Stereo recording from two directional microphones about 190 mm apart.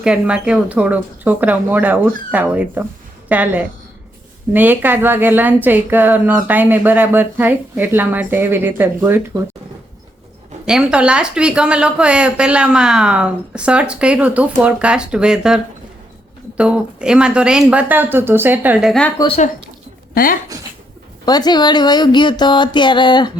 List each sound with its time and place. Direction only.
0.0 s a woman's voice: 5° right (ahead or behind)
10.7 s speech: 5° right (ahead or behind)
21.2 s speech: 20° left (ahead or behind)